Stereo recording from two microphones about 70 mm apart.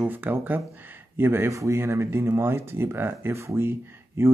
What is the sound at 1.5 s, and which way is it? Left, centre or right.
Speech, right.